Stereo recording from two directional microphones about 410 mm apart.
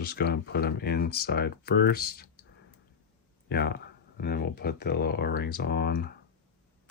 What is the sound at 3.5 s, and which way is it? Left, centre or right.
Speech, left.